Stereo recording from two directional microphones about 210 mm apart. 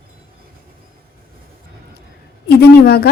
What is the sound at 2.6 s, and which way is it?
Speech, 50° left (ahead or behind).